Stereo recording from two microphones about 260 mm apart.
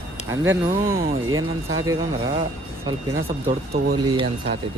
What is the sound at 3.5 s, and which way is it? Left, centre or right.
Speech, right.